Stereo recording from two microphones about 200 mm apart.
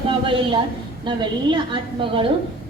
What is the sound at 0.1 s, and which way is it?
A woman's voice, 25° right (ahead or behind).